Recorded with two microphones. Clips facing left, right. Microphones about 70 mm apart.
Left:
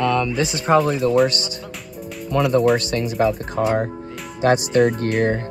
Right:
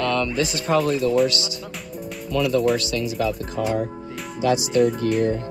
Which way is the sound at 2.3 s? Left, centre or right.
Left.